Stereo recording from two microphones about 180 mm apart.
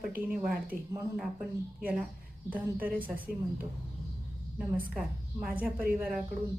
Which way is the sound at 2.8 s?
50° right (ahead or behind).